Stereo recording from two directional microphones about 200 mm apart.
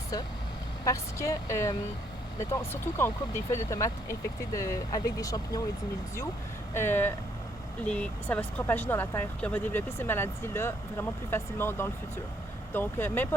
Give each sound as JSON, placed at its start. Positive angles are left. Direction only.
{"t": 0.9, "sound": "speech", "side_deg": 15}
{"t": 3.0, "sound": "speech", "side_deg": 15}
{"t": 6.7, "sound": "speech", "side_deg": 10}